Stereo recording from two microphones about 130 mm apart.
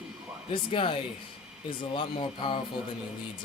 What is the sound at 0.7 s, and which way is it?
Speech, 45° left (ahead or behind).